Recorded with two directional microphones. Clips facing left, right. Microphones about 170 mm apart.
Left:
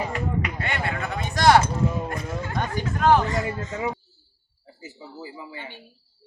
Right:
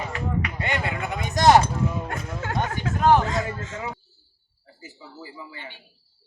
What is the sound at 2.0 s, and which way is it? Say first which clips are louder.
Music: left 1 dB; 80° right.